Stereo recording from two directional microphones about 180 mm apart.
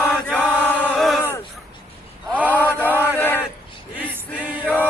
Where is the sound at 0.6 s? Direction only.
10° left (ahead or behind).